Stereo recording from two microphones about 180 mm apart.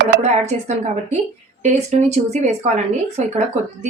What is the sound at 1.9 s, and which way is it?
Speech, 40° right (ahead or behind).